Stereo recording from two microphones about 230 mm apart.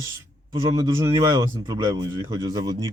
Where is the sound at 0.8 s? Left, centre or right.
Centre.